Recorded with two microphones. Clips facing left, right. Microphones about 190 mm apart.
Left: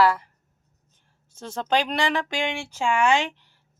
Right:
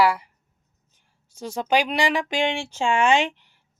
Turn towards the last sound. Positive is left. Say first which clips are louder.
# right 2 dB
turn(degrees=-20)  # may be behind; listen again after turning